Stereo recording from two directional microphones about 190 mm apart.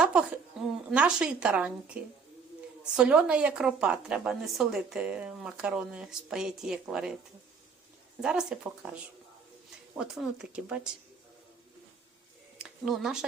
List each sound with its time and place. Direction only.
0.0 s a sound: 5° right (ahead or behind)
0.9 s a woman's voice: 5° right (ahead or behind)
8.2 s a woman's voice: 5° right (ahead or behind)
10.0 s a woman's voice: 5° right (ahead or behind)
12.5 s speech: 5° right (ahead or behind)